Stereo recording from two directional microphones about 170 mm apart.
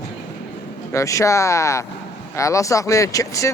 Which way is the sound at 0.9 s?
20° left (ahead or behind).